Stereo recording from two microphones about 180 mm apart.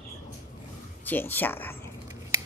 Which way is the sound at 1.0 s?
10° left (ahead or behind).